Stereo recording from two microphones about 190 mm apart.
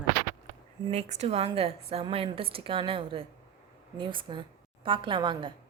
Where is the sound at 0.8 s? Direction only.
35° right (ahead or behind).